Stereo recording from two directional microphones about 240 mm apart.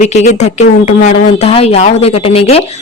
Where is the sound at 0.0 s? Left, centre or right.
Left.